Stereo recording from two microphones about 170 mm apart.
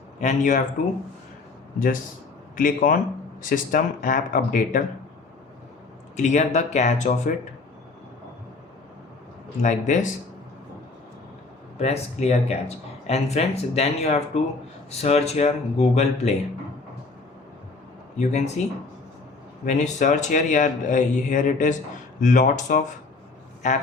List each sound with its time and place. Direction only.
0.2 s speech: 45° left (ahead or behind)
2.6 s speech: 55° left (ahead or behind)
6.1 s speech: 45° left (ahead or behind)
9.6 s speech: 45° left (ahead or behind)
11.8 s speech: 40° left (ahead or behind)
18.2 s speech: 45° left (ahead or behind)
19.6 s speech: 45° left (ahead or behind)